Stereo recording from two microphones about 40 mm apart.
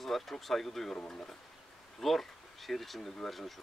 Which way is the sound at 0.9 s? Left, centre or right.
Left.